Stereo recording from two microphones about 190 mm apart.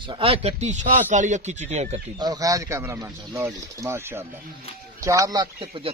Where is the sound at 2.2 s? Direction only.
20° right (ahead or behind).